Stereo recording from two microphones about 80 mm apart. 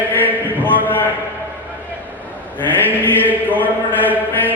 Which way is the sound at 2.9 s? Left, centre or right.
Left.